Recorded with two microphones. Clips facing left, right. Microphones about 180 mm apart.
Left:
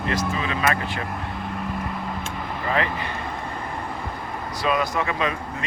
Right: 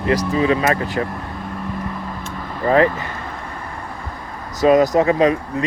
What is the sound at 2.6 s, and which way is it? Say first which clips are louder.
Speech: right 10 dB; 40° right (ahead or behind).